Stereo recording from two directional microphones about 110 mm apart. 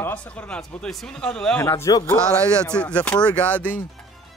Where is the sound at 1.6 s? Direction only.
30° left (ahead or behind).